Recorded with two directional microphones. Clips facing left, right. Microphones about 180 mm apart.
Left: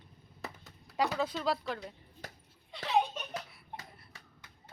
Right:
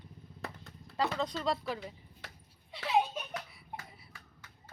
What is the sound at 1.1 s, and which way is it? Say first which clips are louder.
Speech: left 1 dB; 5° left (ahead or behind).